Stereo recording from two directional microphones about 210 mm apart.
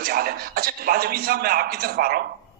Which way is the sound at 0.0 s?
45° right (ahead or behind).